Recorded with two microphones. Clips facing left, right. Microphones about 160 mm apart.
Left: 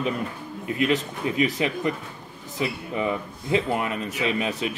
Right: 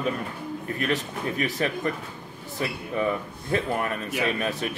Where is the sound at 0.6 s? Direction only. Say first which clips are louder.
Left 5 dB; 15° left (ahead or behind).